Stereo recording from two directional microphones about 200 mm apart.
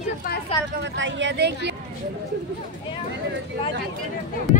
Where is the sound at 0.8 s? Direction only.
65° right (ahead or behind).